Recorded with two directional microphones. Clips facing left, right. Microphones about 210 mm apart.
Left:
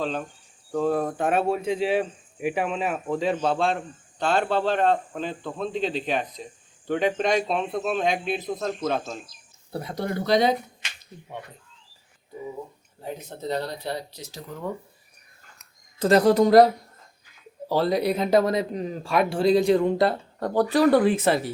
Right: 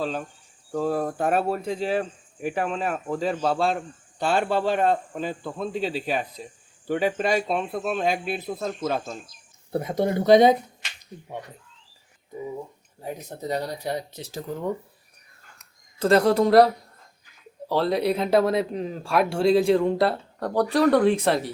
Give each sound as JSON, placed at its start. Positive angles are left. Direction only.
{"t": 0.0, "sound": "a man's voice", "side_deg": -5}
{"t": 10.0, "sound": "speech", "side_deg": -20}
{"t": 13.0, "sound": "a man's voice", "side_deg": -10}
{"t": 16.0, "sound": "speech", "side_deg": 0}